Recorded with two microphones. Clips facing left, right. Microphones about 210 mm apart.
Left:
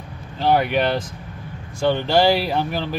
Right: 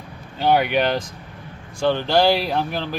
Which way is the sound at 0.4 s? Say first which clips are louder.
Even; centre (ahead or behind).